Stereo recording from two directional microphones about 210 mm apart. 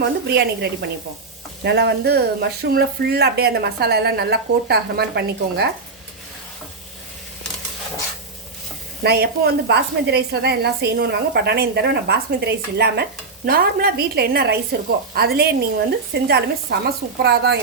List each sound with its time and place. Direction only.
0.0 s a woman's voice: 50° right (ahead or behind)
9.0 s a woman's voice: 50° right (ahead or behind)